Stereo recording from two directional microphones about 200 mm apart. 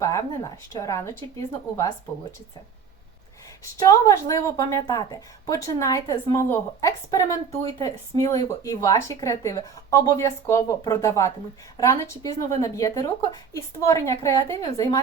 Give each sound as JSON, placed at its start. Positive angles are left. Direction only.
{"t": 0.0, "sound": "speech", "side_deg": 15}
{"t": 3.6, "sound": "speech", "side_deg": 15}